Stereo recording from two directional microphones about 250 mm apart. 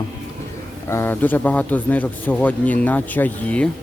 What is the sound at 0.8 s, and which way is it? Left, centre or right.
A man's voice, centre.